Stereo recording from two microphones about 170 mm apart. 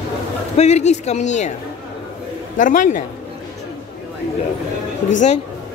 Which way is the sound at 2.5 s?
50° left (ahead or behind).